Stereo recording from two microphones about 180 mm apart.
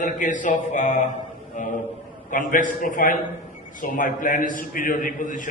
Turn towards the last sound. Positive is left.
turn(degrees=45)  # may be behind; listen again after turning